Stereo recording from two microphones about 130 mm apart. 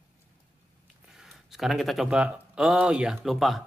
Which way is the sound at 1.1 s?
Centre (ahead or behind).